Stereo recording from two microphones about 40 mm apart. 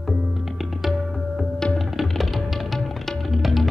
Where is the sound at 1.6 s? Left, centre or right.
Left.